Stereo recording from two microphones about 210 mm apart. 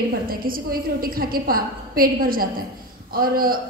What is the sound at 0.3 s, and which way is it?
A man's voice, 45° right (ahead or behind).